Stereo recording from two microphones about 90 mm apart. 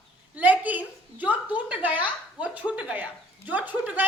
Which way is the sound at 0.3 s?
15° right (ahead or behind).